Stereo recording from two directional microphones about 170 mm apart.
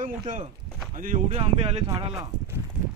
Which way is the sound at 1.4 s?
35° right (ahead or behind).